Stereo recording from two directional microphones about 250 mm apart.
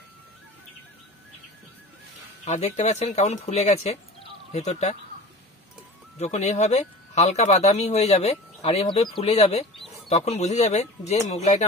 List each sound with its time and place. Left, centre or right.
2.4 s speech: left
6.1 s speech: left